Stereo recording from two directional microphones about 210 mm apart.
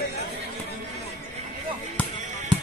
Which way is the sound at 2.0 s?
5° left (ahead or behind).